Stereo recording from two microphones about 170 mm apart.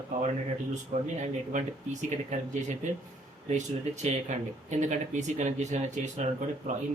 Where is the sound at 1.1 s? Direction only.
45° right (ahead or behind).